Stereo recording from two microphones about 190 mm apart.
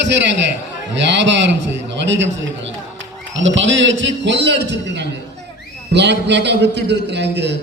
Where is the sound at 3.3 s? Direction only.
75° right (ahead or behind).